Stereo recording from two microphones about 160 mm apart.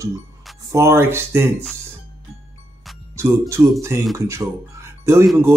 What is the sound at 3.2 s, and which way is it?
Speech, 15° right (ahead or behind).